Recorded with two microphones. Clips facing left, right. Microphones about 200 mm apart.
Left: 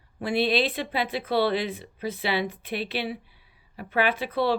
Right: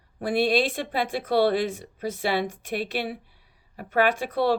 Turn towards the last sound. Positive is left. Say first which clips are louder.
# right 1 dB
turn(degrees=-45)  # may be behind; listen again after turning